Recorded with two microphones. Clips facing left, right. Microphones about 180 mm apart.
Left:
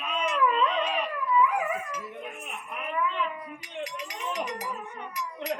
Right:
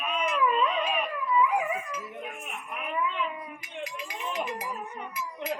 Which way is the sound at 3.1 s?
10° right (ahead or behind).